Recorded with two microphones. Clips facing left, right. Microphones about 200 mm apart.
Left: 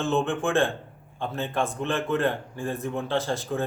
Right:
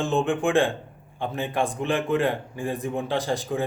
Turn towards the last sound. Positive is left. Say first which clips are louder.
# right 1 dB
turn(degrees=-15)  # may be behind; listen again after turning